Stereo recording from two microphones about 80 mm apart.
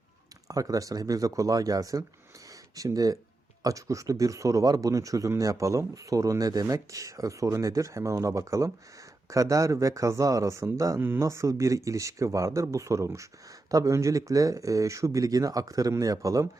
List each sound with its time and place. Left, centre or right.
0.4 s speech: right